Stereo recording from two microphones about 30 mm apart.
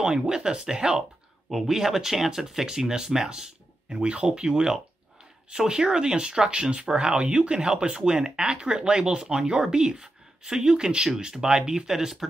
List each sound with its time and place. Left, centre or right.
0.0 s speech: right
1.5 s speech: centre
3.9 s speech: right; by 12.3 s centre